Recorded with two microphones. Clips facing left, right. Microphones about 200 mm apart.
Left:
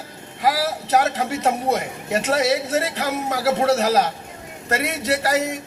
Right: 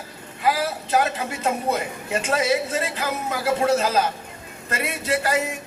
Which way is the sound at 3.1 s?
40° left (ahead or behind).